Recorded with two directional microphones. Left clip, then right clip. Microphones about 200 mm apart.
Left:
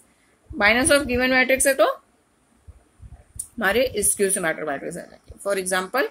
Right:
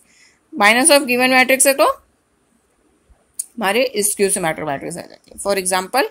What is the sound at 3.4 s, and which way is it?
A woman's voice, 40° right (ahead or behind).